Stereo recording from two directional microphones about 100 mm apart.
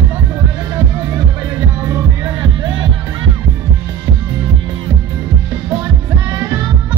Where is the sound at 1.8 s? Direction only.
25° right (ahead or behind).